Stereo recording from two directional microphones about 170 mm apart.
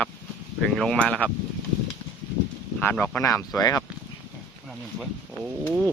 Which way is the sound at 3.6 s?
20° left (ahead or behind).